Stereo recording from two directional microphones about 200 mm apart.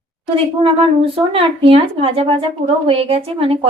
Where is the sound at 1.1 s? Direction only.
25° right (ahead or behind).